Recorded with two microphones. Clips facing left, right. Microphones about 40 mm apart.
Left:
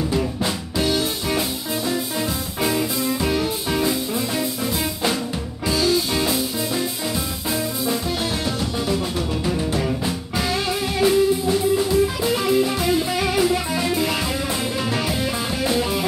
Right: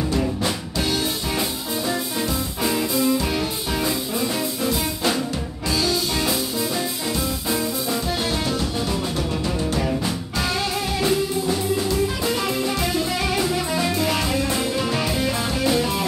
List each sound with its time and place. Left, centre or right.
0.1 s music: centre
2.7 s music: centre
5.7 s music: centre
7.9 s music: centre